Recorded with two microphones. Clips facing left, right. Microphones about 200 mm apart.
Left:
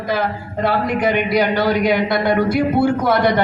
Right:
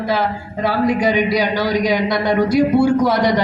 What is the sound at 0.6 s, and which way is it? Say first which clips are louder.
A man's voice: right 2 dB; 55° left (ahead or behind).